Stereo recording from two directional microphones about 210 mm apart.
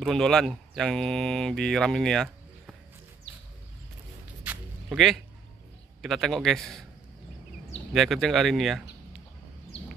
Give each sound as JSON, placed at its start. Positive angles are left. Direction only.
{"t": 0.0, "sound": "speech", "side_deg": 0}
{"t": 4.5, "sound": "zipper", "side_deg": 0}
{"t": 6.0, "sound": "speech", "side_deg": 0}
{"t": 7.9, "sound": "speech", "side_deg": 0}